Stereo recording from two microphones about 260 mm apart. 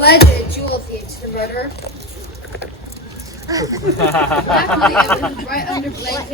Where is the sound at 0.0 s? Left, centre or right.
Left.